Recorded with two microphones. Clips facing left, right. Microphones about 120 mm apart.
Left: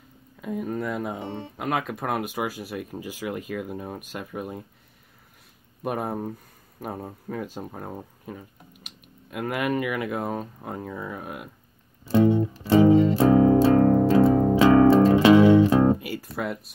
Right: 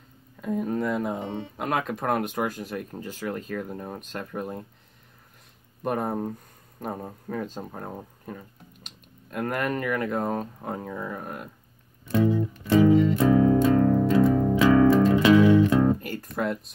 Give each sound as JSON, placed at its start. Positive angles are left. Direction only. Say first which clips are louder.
{"t": 0.4, "sound": "speech", "louder": "right 2 dB", "side_deg": 5}
{"t": 5.8, "sound": "speech", "louder": "right 1 dB", "side_deg": 5}
{"t": 12.0, "sound": "music", "louder": "left 4 dB", "side_deg": 30}
{"t": 13.7, "sound": "music", "louder": "left 2 dB", "side_deg": 40}
{"t": 16.0, "sound": "speech", "louder": "right 1 dB", "side_deg": 10}